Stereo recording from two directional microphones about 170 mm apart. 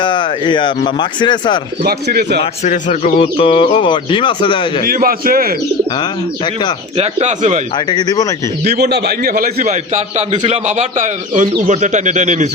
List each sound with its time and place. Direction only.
0.0 s speech: 30° left (ahead or behind)
1.8 s a man's voice: 65° right (ahead or behind)
2.4 s speech: 45° left (ahead or behind)
4.9 s a man's voice: 60° right (ahead or behind)
6.0 s speech: 25° left (ahead or behind)
6.9 s a man's voice: 40° right (ahead or behind)
7.9 s speech: 25° left (ahead or behind)
8.6 s a man's voice: 70° right (ahead or behind)
9.6 s a man's voice: 45° right (ahead or behind)